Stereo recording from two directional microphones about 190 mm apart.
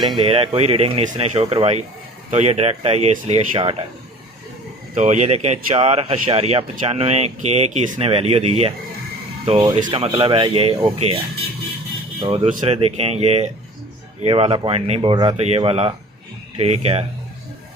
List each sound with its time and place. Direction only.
0.2 s speech: 30° right (ahead or behind)
4.9 s speech: 35° right (ahead or behind)
12.2 s speech: 30° right (ahead or behind)